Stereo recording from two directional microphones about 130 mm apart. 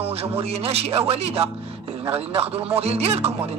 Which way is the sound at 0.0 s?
50° right (ahead or behind).